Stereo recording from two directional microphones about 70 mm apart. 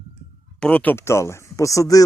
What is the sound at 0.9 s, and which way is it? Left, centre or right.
Speech, left.